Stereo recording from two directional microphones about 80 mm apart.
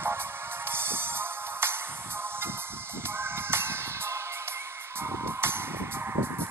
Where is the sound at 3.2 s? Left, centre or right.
Right.